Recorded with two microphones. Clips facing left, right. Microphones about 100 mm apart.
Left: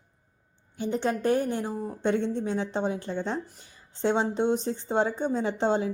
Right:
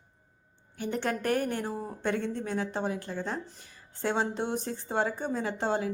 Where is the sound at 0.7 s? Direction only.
20° left (ahead or behind).